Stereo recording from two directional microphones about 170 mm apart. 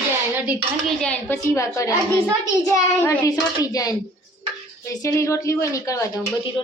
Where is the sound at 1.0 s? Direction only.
10° left (ahead or behind).